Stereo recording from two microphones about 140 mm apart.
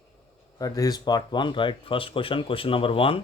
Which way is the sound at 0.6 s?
25° left (ahead or behind).